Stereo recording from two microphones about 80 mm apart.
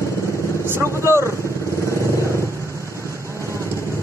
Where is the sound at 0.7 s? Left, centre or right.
Right.